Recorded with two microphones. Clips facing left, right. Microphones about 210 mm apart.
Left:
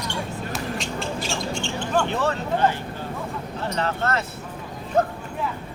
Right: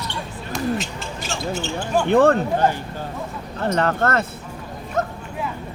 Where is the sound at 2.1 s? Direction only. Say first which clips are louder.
Right 10 dB; 55° right (ahead or behind).